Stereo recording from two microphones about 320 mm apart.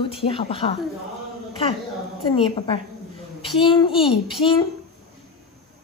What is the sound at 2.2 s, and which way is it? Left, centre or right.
A woman's voice, centre.